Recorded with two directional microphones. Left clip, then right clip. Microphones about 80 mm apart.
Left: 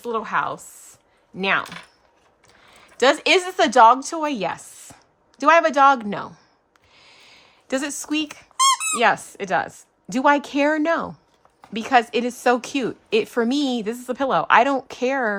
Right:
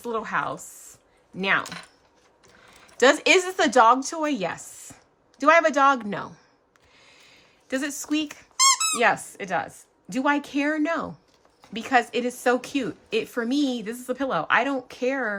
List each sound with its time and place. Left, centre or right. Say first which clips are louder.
0.0 s a woman's voice: left 4 dB; left
3.0 s a woman's voice: left 1 dB; left
6.9 s a sound: left 4 dB; left
8.9 s a woman's voice: left 3 dB; left
11.7 s a woman's voice: left 4 dB; left